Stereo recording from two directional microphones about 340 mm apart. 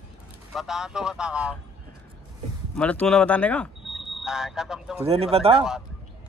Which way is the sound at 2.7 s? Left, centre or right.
Centre.